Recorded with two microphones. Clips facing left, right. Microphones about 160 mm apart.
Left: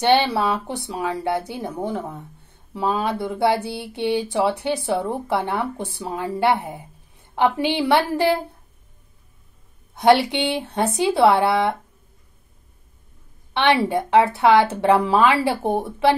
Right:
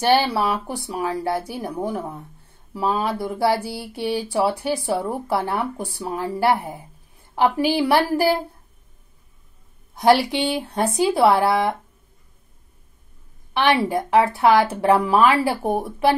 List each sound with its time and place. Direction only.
0.0 s a woman's voice: 20° left (ahead or behind)
10.1 s speech: 25° left (ahead or behind)
13.5 s speech: 25° left (ahead or behind)